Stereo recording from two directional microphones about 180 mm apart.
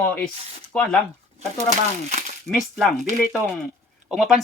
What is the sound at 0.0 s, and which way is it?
Speech, 10° left (ahead or behind).